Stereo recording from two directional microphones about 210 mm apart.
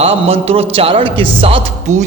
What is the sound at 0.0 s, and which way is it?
A man's voice, 30° right (ahead or behind).